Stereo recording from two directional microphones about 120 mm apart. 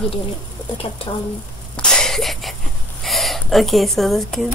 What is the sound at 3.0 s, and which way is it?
Speech, centre (ahead or behind).